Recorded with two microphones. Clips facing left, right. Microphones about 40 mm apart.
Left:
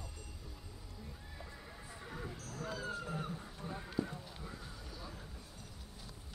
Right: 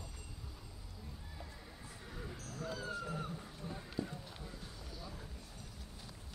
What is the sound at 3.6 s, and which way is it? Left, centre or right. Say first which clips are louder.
Horse: left 3 dB; left.